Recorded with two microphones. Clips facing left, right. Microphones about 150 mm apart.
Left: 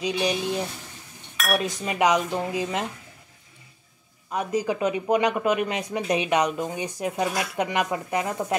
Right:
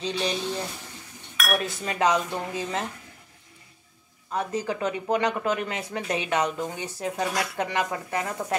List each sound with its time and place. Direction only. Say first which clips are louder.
0.0 s speech: left 3 dB; 10° left (ahead or behind)
4.3 s speech: left 3 dB; 15° left (ahead or behind)